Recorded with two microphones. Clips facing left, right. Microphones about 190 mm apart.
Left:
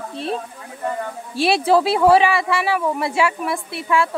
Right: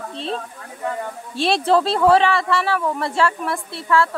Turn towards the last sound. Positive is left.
turn(degrees=15)  # may be behind; listen again after turning